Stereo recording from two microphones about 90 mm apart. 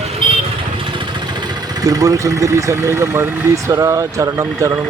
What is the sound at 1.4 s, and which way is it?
Speech, 45° right (ahead or behind).